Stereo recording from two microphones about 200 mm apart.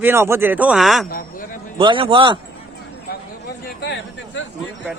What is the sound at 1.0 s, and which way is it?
Speech, 45° left (ahead or behind).